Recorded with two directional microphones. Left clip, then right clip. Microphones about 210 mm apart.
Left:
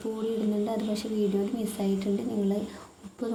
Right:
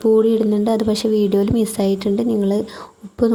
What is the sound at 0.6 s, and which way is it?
Speech, 40° right (ahead or behind).